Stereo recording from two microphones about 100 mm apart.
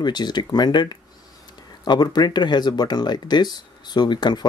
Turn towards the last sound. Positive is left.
turn(degrees=45)  # may be behind; listen again after turning